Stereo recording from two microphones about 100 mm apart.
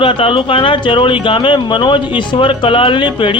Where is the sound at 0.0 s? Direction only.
60° left (ahead or behind).